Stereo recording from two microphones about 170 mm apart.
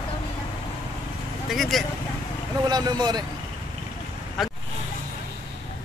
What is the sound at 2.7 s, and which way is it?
Speech, 25° right (ahead or behind).